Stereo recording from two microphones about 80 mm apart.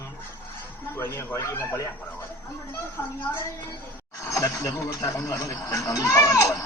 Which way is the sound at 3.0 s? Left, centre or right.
Left.